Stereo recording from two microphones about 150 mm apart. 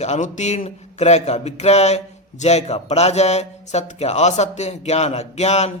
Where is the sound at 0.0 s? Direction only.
50° left (ahead or behind).